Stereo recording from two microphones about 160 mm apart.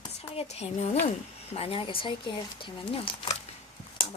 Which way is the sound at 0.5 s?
40° left (ahead or behind).